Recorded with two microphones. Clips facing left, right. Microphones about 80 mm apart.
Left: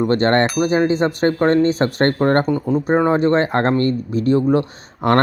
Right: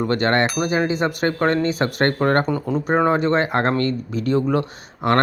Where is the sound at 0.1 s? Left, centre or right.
Left.